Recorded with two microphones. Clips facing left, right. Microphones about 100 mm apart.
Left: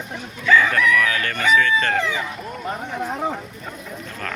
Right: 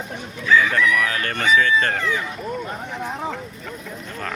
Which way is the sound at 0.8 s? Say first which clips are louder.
Left 1 dB; 20° right (ahead or behind).